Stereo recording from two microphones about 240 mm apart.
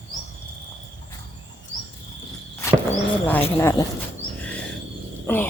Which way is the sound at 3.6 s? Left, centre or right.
Centre.